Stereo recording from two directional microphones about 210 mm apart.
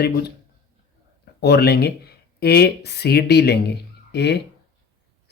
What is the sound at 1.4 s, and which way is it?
Speech, 50° left (ahead or behind).